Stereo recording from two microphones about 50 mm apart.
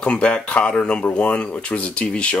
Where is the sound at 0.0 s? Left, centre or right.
Left.